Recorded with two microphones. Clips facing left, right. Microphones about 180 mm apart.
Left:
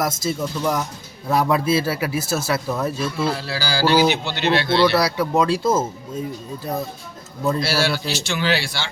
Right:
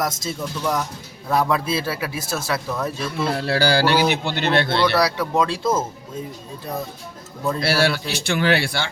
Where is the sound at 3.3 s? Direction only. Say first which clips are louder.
Right 6 dB; 60° right (ahead or behind).